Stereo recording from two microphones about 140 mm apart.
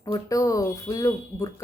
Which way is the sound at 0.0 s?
25° left (ahead or behind).